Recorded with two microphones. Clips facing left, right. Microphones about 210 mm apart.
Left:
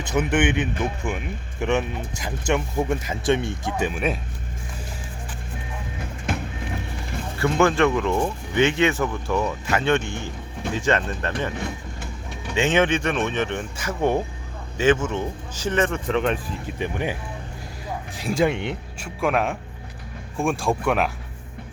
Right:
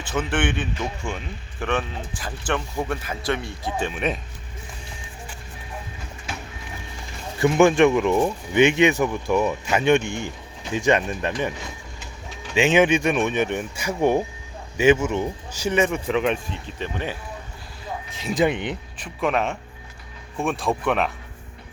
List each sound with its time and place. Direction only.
0.1 s a man's voice: 20° left (ahead or behind)
1.5 s speech: 20° left (ahead or behind)
3.9 s speech: 5° left (ahead or behind)
7.3 s speech: 15° right (ahead or behind)
12.5 s speech: 10° right (ahead or behind)
16.7 s speech: 15° left (ahead or behind)
18.3 s speech: centre (ahead or behind)